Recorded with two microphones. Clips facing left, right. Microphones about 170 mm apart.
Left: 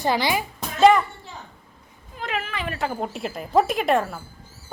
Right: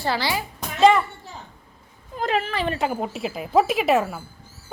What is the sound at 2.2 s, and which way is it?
Speech, 35° right (ahead or behind).